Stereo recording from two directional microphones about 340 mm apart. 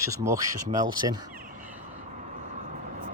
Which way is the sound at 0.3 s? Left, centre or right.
Centre.